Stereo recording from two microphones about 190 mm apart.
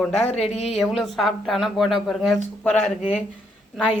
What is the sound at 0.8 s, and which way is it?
Speech, centre (ahead or behind).